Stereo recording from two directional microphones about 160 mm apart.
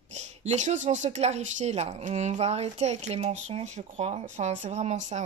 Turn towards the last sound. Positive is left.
turn(degrees=-50)  # may be behind; listen again after turning